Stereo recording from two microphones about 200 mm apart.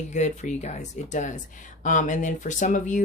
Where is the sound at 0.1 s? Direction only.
35° left (ahead or behind).